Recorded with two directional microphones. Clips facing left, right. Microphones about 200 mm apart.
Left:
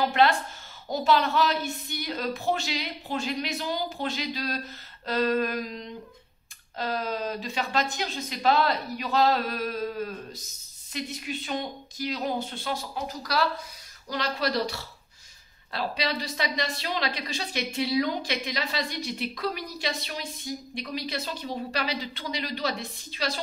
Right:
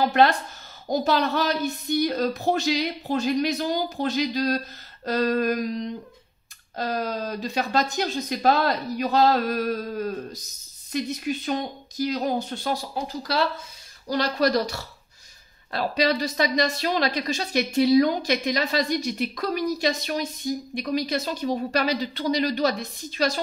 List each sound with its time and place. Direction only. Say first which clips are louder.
0.1 s speech: right 3 dB; 40° right (ahead or behind)
6.8 s a woman's voice: right 2 dB; 40° right (ahead or behind)